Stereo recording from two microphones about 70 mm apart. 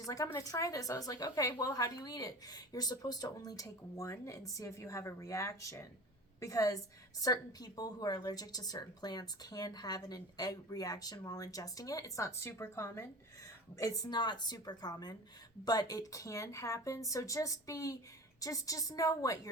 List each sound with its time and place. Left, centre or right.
0.0 s a woman's voice: left
7.2 s a woman's voice: left